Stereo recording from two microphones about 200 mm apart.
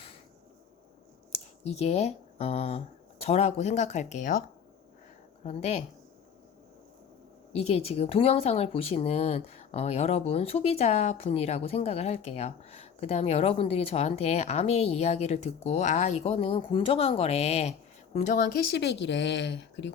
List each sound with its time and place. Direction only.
1.6 s speech: 30° left (ahead or behind)
7.5 s speech: 30° left (ahead or behind); by 19.9 s 60° left (ahead or behind)